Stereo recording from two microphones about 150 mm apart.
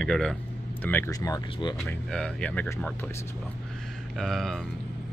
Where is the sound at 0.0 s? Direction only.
5° left (ahead or behind).